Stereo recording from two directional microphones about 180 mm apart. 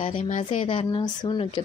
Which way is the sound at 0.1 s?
45° left (ahead or behind).